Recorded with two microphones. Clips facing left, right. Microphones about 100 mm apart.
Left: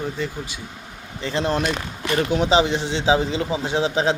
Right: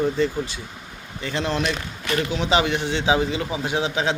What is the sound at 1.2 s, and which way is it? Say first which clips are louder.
A man's voice: left 2 dB; 30° left (ahead or behind).